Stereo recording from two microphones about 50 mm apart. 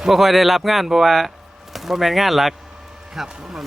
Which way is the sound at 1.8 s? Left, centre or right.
Centre.